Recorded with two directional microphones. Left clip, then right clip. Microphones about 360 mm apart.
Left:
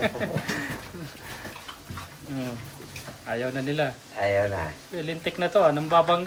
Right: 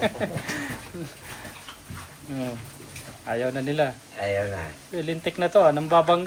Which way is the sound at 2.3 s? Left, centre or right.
Centre.